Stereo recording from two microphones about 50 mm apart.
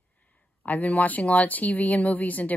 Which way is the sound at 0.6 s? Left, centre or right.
Left.